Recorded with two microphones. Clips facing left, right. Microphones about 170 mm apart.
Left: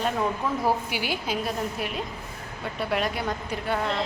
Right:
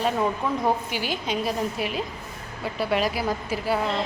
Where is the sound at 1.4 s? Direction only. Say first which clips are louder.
Right 3 dB; centre (ahead or behind).